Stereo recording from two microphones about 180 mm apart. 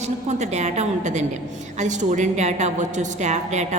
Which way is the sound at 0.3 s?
40° right (ahead or behind).